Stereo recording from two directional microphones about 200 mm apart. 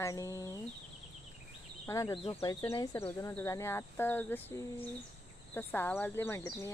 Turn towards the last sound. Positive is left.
turn(degrees=15)  # may be behind; listen again after turning